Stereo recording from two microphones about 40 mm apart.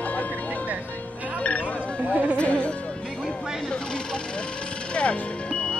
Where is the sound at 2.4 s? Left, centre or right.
Left.